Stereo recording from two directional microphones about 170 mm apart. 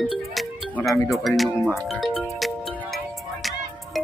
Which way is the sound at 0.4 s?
Centre (ahead or behind).